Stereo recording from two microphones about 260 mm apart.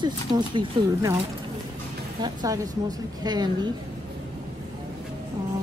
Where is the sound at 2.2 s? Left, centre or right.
Centre.